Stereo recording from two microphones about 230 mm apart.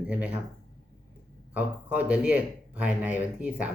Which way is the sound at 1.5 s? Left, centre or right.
Centre.